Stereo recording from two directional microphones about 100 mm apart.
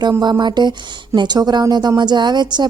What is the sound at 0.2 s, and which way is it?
Speech, 45° right (ahead or behind).